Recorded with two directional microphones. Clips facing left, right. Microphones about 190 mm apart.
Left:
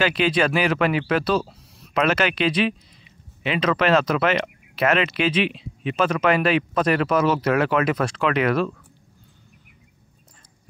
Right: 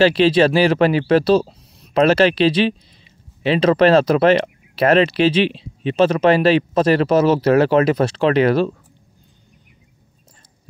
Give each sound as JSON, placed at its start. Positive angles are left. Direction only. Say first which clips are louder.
{"t": 0.0, "sound": "speech", "louder": "right 7 dB", "side_deg": -30}